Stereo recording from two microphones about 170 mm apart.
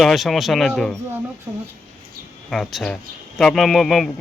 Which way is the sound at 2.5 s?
Centre (ahead or behind).